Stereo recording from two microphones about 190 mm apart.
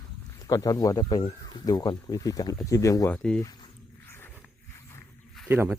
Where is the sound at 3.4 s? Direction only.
15° left (ahead or behind).